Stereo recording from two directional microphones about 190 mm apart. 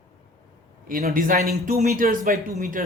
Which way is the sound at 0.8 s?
50° right (ahead or behind).